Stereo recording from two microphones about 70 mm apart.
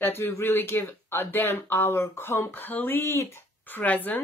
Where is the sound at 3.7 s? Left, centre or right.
Left.